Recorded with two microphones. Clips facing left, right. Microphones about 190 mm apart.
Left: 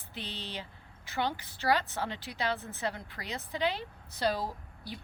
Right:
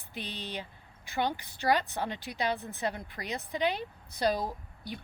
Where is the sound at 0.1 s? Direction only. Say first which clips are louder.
Right 2 dB; 15° right (ahead or behind).